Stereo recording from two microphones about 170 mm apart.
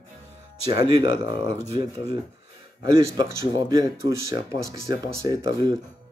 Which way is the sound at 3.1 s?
25° right (ahead or behind).